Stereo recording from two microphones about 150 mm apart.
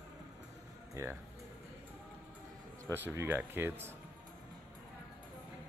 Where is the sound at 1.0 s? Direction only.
20° right (ahead or behind).